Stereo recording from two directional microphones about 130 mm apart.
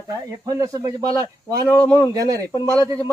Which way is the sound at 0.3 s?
25° right (ahead or behind).